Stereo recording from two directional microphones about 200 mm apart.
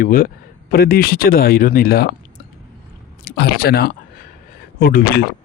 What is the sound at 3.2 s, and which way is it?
Speech, 55° left (ahead or behind).